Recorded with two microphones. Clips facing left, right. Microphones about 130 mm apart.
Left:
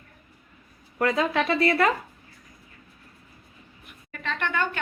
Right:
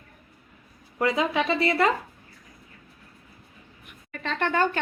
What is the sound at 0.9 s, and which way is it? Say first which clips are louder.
Speech: even; 15° right (ahead or behind).